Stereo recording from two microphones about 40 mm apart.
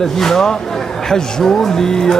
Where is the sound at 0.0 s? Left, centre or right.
Centre.